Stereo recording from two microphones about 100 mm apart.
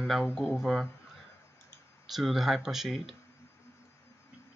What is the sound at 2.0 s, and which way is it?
Speech, centre (ahead or behind).